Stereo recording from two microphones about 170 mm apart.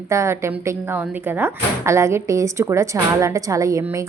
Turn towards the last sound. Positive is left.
turn(degrees=-20)  # may be behind; listen again after turning